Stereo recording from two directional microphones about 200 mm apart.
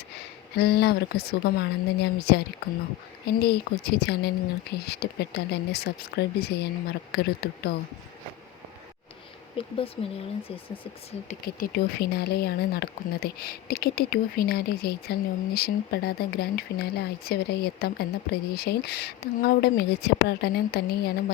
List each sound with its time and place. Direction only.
0.5 s speech: 55° left (ahead or behind)
9.6 s speech: 30° left (ahead or behind)
11.3 s speech: 45° left (ahead or behind)